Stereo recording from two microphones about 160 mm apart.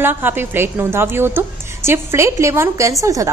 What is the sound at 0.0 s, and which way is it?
A woman's voice, 15° right (ahead or behind).